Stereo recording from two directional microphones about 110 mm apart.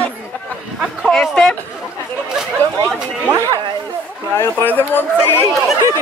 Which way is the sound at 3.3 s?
30° right (ahead or behind).